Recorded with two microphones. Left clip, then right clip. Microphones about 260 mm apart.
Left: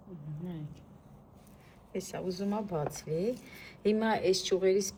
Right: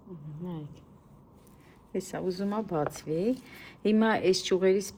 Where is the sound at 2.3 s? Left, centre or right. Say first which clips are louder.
Right 3 dB; right.